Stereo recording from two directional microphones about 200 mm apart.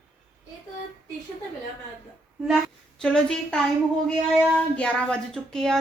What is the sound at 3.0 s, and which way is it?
Speech, 5° left (ahead or behind).